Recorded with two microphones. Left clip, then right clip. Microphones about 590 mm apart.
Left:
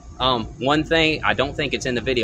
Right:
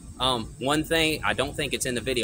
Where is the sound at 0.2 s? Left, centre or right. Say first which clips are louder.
Left 5 dB; right.